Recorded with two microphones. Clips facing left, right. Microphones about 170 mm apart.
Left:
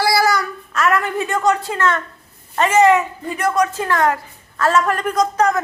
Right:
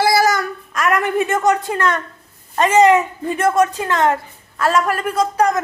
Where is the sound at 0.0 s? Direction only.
20° right (ahead or behind).